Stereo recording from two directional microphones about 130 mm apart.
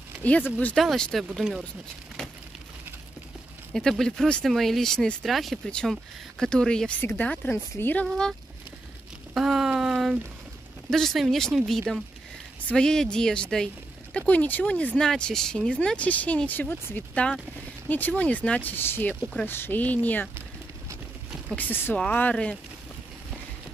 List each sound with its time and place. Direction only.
0.2 s speech: 10° left (ahead or behind)
3.7 s speech: 5° left (ahead or behind)
9.3 s a sound: 5° right (ahead or behind)
10.9 s speech: centre (ahead or behind)
21.5 s speech: 15° left (ahead or behind)